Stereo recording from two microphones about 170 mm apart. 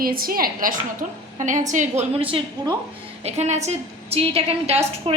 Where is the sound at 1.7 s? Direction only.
45° right (ahead or behind).